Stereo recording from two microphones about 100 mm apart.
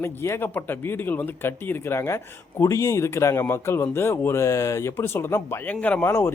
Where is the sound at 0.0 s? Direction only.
25° left (ahead or behind).